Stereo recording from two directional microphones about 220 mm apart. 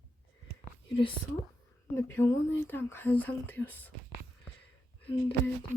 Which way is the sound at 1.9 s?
10° left (ahead or behind).